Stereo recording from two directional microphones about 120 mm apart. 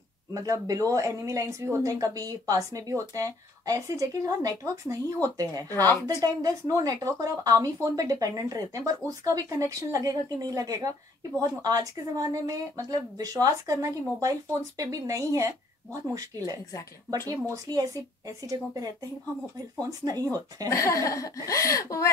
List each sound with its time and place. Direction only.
0.3 s a woman's voice: 30° right (ahead or behind)
5.7 s a woman's voice: 20° left (ahead or behind)
6.2 s a woman's voice: 30° right (ahead or behind)
19.9 s a woman's voice: 30° right (ahead or behind)
20.7 s a woman's voice: 25° left (ahead or behind)